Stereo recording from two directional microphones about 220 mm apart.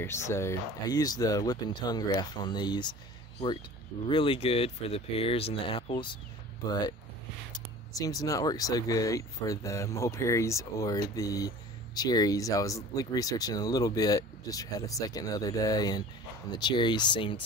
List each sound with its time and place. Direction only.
0.0 s speech: 10° left (ahead or behind)